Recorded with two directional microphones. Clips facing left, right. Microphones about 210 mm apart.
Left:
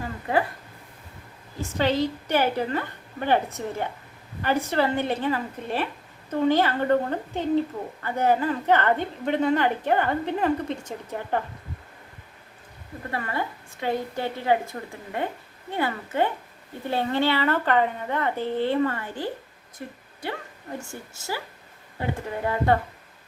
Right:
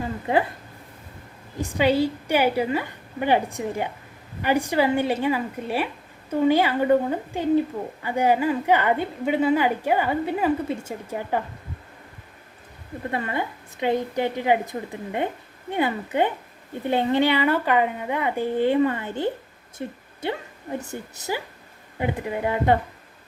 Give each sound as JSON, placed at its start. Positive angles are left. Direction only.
{"t": 0.0, "sound": "a sound", "side_deg": -20}
{"t": 1.6, "sound": "a woman's voice", "side_deg": -10}
{"t": 13.1, "sound": "a woman's voice", "side_deg": -20}